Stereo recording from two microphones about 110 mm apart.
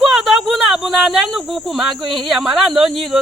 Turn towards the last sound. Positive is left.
turn(degrees=-5)  # may be behind; listen again after turning